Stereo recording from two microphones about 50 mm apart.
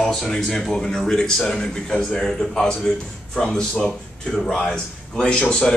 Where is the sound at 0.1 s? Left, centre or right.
Centre.